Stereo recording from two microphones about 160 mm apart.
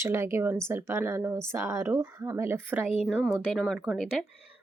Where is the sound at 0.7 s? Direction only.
15° right (ahead or behind).